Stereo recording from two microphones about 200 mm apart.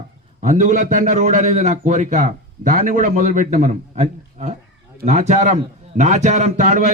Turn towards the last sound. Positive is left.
turn(degrees=-40)  # may be behind; listen again after turning